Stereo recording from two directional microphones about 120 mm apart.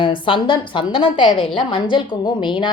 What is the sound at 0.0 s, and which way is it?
A woman's voice, 45° left (ahead or behind).